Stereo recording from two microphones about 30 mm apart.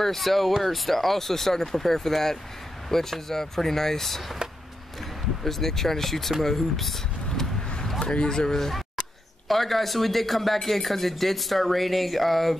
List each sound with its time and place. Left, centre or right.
0.0 s speech: centre
5.4 s speech: centre
8.0 s speech: left
8.5 s speech: centre